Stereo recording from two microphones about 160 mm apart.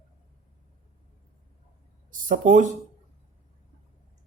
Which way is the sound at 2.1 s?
60° right (ahead or behind).